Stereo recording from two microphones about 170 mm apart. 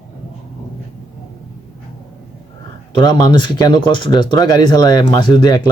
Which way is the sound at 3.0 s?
25° left (ahead or behind).